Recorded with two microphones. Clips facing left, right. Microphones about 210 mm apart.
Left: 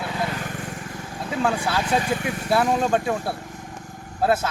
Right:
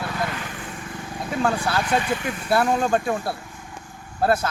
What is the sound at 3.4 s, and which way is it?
Vehicle, 40° left (ahead or behind).